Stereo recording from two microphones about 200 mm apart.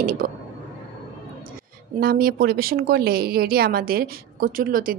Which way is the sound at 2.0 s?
50° right (ahead or behind).